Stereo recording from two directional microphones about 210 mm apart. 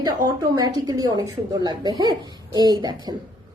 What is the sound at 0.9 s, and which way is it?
A woman's voice, 20° right (ahead or behind).